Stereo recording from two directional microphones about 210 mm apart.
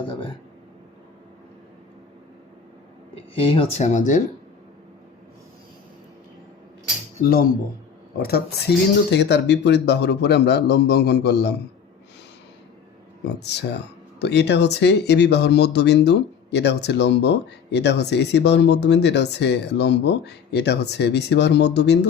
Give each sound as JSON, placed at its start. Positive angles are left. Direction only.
{"t": 0.0, "sound": "a sound", "side_deg": 25}
{"t": 3.3, "sound": "speech", "side_deg": 25}
{"t": 7.2, "sound": "speech", "side_deg": 45}
{"t": 13.2, "sound": "speech", "side_deg": 55}